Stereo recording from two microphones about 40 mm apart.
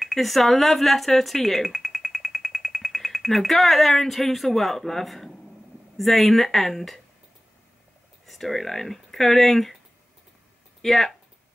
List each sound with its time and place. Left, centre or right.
0.0 s speech: centre
8.3 s speech: centre
10.8 s speech: centre